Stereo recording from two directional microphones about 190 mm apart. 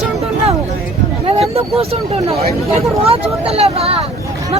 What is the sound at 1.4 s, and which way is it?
Speech, 30° right (ahead or behind).